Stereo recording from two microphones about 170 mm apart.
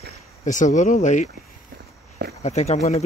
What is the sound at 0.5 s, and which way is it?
Speech, 45° left (ahead or behind).